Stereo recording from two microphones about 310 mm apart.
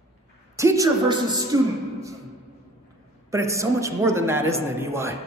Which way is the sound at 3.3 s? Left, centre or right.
Centre.